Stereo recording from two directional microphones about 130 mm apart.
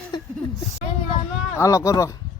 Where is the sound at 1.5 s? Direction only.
25° left (ahead or behind).